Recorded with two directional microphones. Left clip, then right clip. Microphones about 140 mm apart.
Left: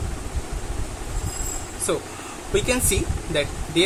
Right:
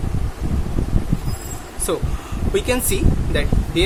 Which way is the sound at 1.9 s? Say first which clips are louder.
Right 2 dB; 30° right (ahead or behind).